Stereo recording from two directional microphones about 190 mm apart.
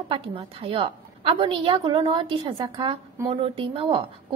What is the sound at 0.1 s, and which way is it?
A woman's voice, 30° right (ahead or behind).